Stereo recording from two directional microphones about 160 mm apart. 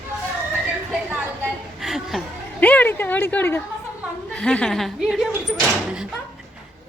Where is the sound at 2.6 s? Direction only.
10° left (ahead or behind).